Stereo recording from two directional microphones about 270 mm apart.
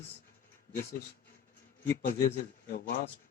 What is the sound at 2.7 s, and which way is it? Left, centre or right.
Speech, left.